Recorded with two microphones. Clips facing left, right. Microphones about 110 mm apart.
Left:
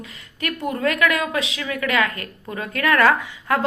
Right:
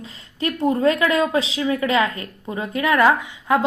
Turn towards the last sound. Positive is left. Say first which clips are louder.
# right 2 dB
turn(degrees=-20)  # may be behind; listen again after turning